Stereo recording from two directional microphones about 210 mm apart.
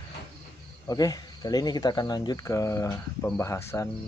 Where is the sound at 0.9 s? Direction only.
20° left (ahead or behind).